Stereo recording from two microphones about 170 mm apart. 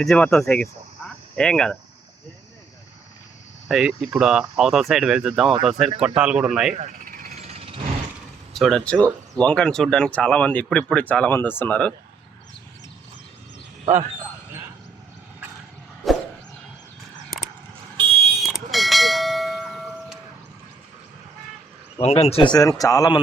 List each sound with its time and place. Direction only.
0.0 s speech: centre (ahead or behind)
3.7 s speech: 5° right (ahead or behind)
6.7 s a sound: 45° right (ahead or behind)
8.5 s speech: centre (ahead or behind)
16.0 s a sound: centre (ahead or behind)
17.9 s car alarm: 35° right (ahead or behind)
18.4 s bell: centre (ahead or behind)
22.0 s a man's voice: 40° left (ahead or behind)